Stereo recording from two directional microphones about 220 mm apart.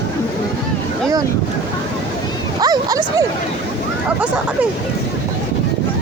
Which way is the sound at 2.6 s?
15° right (ahead or behind).